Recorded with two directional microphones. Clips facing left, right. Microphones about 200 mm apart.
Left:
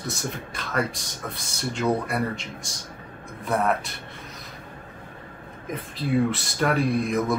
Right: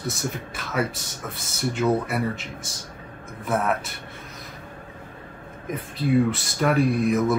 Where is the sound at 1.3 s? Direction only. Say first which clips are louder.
Right 5 dB; 5° right (ahead or behind).